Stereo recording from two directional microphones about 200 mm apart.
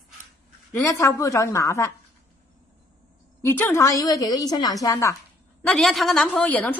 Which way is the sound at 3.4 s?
10° left (ahead or behind).